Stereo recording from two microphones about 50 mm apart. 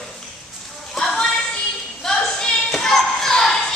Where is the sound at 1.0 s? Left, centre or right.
Centre.